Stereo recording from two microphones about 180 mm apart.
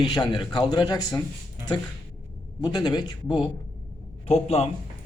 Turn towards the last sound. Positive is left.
turn(degrees=35)  # may be behind; listen again after turning